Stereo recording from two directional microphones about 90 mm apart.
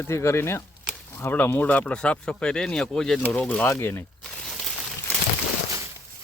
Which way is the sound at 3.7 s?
25° left (ahead or behind).